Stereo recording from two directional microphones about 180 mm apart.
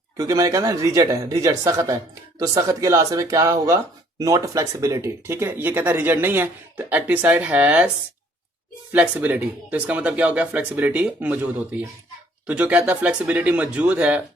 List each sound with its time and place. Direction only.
0.2 s speech: 20° right (ahead or behind)
8.9 s speech: 10° right (ahead or behind)